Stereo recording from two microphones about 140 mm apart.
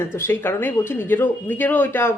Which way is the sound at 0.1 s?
15° left (ahead or behind).